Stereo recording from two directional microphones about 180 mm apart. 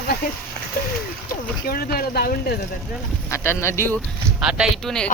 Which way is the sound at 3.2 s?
15° left (ahead or behind).